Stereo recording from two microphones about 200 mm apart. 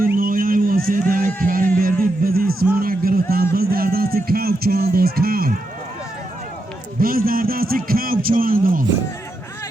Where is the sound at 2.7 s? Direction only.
45° right (ahead or behind).